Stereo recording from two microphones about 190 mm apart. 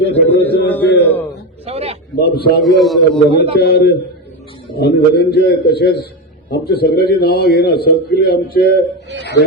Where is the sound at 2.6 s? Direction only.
Centre (ahead or behind).